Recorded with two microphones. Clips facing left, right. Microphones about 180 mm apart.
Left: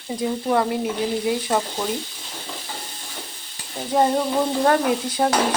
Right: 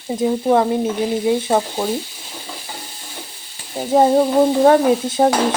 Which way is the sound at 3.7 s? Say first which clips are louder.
Right 5 dB; 25° right (ahead or behind).